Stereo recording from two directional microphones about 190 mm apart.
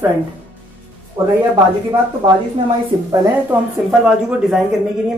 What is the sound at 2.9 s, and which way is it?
Speech, 25° right (ahead or behind).